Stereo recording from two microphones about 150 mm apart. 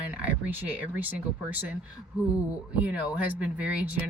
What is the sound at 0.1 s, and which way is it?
Speech, 10° right (ahead or behind).